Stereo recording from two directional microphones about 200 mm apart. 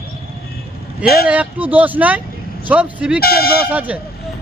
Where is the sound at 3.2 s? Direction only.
50° left (ahead or behind).